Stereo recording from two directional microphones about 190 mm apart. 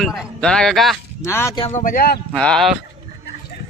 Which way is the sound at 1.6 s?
40° left (ahead or behind).